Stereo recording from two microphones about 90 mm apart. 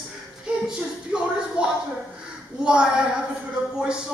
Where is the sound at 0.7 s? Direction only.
10° right (ahead or behind).